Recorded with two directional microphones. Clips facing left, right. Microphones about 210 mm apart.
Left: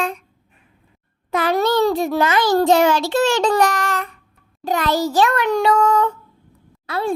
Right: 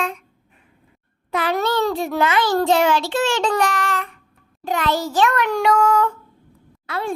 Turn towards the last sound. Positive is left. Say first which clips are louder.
# left 3 dB
turn(degrees=35)  # may be behind; listen again after turning